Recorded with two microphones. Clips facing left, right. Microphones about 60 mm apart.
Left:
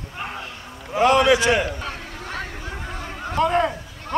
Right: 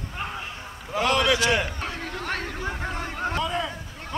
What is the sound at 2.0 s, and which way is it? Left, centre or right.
Chatter, right.